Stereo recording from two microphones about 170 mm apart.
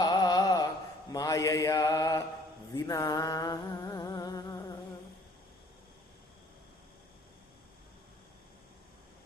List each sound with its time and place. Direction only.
0.0 s carnatic music: 25° left (ahead or behind)
1.1 s mantra: 20° left (ahead or behind)
2.7 s a sound: 20° left (ahead or behind)